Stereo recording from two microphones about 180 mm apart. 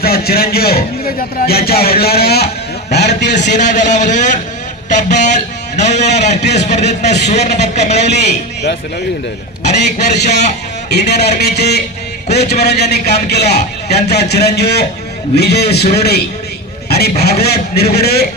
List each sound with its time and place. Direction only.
0.0 s a man's voice: 60° left (ahead or behind)
3.4 s speech: 40° left (ahead or behind)
6.4 s speech: 70° left (ahead or behind)
6.9 s speech: 40° left (ahead or behind)
9.6 s a man's voice: 40° left (ahead or behind)
10.9 s a man's voice: 65° left (ahead or behind)
17.2 s a man's voice: 60° left (ahead or behind)